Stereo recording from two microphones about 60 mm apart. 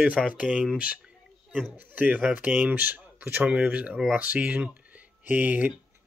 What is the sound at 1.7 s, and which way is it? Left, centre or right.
Speech, right.